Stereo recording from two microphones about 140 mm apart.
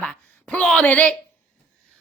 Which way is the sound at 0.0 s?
10° left (ahead or behind).